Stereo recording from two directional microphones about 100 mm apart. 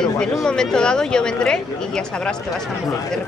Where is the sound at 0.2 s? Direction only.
10° left (ahead or behind).